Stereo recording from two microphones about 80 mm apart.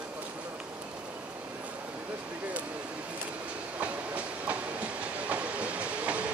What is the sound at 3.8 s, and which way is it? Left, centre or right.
Train, centre.